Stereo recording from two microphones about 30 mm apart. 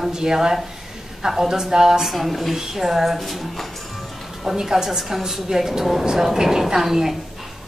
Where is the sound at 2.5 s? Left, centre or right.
Centre.